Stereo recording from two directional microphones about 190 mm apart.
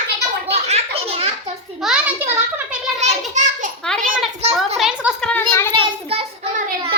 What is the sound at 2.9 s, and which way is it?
Speech, 35° right (ahead or behind).